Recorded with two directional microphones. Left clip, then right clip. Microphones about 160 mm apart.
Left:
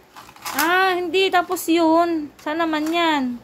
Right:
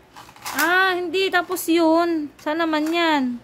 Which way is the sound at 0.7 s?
15° right (ahead or behind).